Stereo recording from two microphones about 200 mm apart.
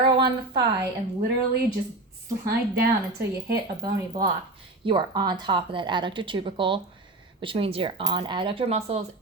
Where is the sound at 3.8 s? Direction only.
20° right (ahead or behind).